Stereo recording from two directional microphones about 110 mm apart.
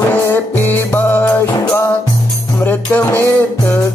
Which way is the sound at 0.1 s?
20° left (ahead or behind).